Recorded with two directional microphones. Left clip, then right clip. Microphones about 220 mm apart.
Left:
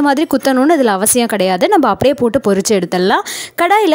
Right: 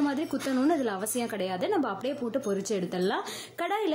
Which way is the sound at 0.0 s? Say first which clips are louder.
Left 17 dB; 45° left (ahead or behind).